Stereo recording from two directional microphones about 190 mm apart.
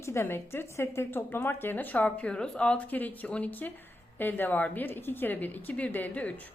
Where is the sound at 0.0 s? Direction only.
15° left (ahead or behind).